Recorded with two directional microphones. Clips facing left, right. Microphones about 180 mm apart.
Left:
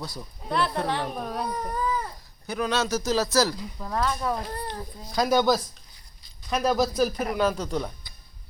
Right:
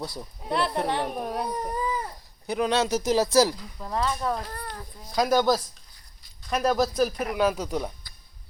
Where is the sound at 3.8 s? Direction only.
Centre (ahead or behind).